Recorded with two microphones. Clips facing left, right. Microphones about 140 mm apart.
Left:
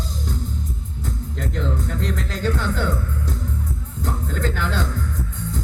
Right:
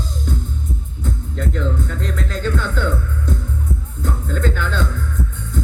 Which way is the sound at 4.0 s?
35° left (ahead or behind).